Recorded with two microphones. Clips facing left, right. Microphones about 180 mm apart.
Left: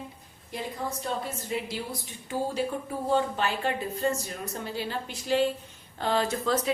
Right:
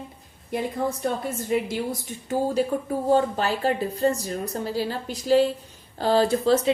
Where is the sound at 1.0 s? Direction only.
50° right (ahead or behind).